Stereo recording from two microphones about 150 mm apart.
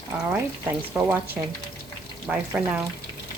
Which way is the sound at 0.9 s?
20° right (ahead or behind).